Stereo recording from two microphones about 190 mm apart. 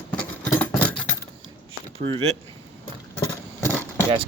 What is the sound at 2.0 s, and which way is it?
Speech, 30° right (ahead or behind).